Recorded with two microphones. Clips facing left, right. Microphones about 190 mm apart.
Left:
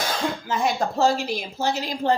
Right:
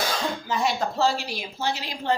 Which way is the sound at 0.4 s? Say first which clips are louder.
Left 1 dB; 50° left (ahead or behind).